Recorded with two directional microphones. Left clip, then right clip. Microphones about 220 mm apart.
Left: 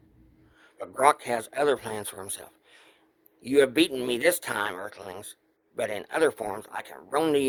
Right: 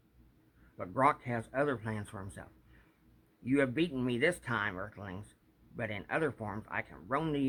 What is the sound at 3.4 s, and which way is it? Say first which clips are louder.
Speech: left 10 dB; 45° left (ahead or behind).